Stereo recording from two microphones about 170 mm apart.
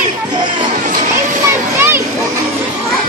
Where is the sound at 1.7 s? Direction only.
15° right (ahead or behind).